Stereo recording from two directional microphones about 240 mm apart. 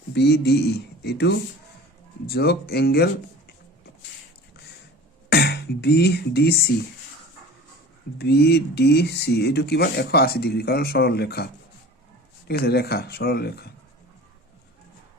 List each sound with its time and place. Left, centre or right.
0.1 s speech: left
5.3 s speech: left
8.2 s speech: left
12.5 s speech: left